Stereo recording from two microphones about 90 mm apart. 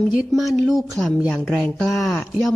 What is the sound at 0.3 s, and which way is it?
Speech, centre (ahead or behind).